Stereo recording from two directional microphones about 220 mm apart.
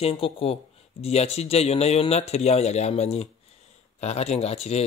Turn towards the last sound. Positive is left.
turn(degrees=30)  # may be behind; listen again after turning